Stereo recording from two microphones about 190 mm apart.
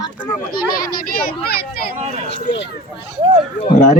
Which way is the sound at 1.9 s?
35° right (ahead or behind).